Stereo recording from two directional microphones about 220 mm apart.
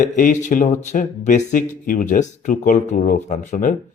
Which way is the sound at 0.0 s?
35° left (ahead or behind).